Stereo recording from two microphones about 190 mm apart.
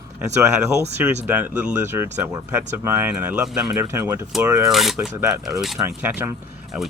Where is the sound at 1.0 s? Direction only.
10° right (ahead or behind).